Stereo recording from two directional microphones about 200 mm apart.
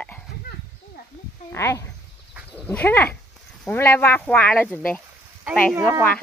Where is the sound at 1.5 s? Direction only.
15° left (ahead or behind).